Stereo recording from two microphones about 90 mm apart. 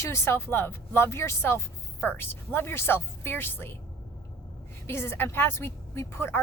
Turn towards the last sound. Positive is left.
turn(degrees=25)  # may be behind; listen again after turning